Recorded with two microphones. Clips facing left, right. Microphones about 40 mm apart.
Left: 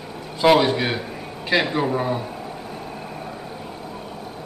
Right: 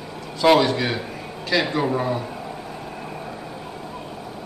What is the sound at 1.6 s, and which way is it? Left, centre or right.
Speech, centre.